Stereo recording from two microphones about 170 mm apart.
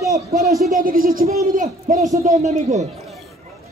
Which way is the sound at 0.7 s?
55° right (ahead or behind).